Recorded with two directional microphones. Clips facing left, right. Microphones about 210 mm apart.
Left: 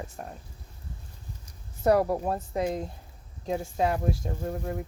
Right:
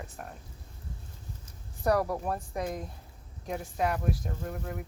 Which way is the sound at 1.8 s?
25° left (ahead or behind).